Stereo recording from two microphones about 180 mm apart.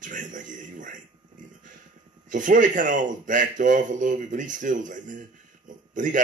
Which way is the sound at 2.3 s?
45° right (ahead or behind).